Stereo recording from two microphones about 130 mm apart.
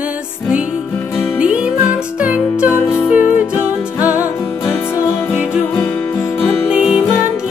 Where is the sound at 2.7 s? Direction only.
20° left (ahead or behind).